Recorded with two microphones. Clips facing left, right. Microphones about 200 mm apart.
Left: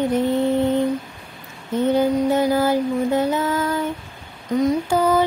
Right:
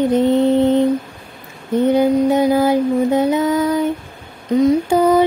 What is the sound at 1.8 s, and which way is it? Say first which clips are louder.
Mantra: right 4 dB; 15° right (ahead or behind).